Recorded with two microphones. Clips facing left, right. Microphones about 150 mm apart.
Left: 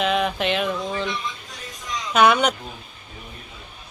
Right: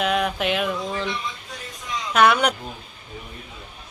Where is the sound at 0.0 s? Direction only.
5° right (ahead or behind).